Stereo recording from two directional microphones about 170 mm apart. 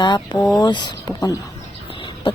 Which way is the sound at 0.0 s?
25° left (ahead or behind).